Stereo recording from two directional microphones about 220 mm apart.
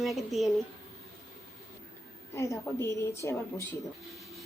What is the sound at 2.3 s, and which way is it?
A woman's voice, 15° left (ahead or behind).